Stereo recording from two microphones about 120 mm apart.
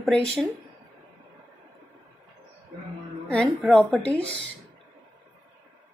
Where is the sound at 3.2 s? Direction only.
10° left (ahead or behind).